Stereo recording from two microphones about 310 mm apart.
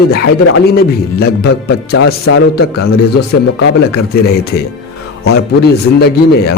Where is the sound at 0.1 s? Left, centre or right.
Left.